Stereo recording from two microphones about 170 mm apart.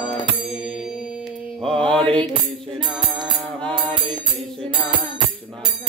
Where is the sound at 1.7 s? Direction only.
5° left (ahead or behind).